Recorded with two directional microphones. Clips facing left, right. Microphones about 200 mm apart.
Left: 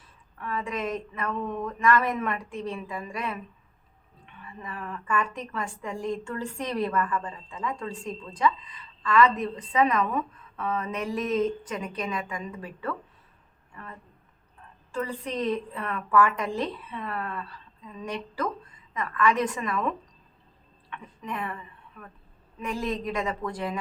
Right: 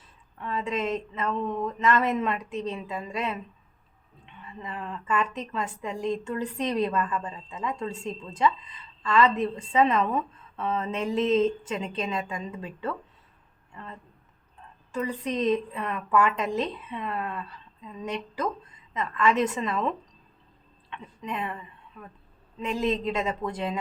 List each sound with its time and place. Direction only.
0.3 s a woman's voice: 25° right (ahead or behind)
14.9 s a woman's voice: 15° right (ahead or behind)
20.9 s a sound: 20° right (ahead or behind)
22.5 s a woman's voice: 20° right (ahead or behind)